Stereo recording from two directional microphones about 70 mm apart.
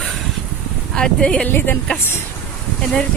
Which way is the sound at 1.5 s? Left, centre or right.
Left.